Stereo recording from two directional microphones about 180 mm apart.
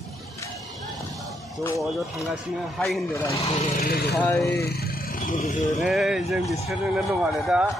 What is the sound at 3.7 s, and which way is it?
Speech, 55° left (ahead or behind).